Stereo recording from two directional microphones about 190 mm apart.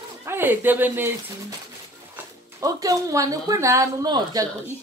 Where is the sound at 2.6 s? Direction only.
15° right (ahead or behind).